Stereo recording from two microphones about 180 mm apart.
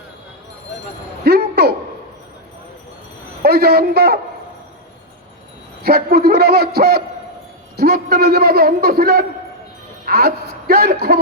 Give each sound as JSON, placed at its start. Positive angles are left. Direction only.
{"t": 1.2, "sound": "a sound", "side_deg": -60}
{"t": 3.4, "sound": "a man's voice", "side_deg": -60}
{"t": 5.8, "sound": "a man's voice", "side_deg": -60}